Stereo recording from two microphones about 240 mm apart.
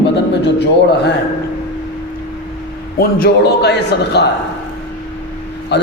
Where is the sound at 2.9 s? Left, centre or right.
Left.